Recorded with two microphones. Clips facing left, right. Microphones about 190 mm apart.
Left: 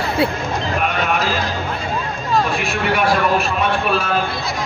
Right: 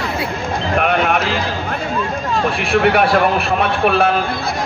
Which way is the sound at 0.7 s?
60° right (ahead or behind).